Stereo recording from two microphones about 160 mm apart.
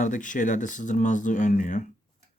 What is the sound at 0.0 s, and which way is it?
Speech, 50° left (ahead or behind).